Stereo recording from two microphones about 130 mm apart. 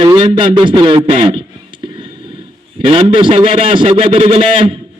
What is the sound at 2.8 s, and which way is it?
A man's voice, 45° right (ahead or behind).